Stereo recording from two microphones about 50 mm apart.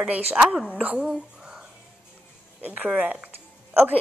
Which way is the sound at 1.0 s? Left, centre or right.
Centre.